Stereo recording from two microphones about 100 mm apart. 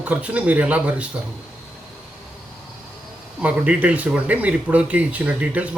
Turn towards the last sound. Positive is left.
turn(degrees=-15)  # may be behind; listen again after turning